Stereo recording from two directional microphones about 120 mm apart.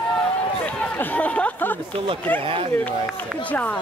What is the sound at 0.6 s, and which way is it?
Speech, 10° left (ahead or behind).